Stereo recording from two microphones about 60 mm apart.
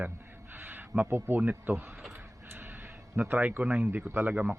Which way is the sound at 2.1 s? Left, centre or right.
Right.